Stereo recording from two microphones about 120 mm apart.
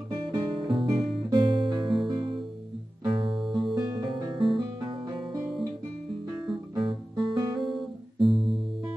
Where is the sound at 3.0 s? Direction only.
45° right (ahead or behind).